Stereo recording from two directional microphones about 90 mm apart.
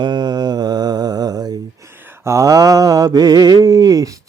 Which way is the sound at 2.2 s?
35° right (ahead or behind).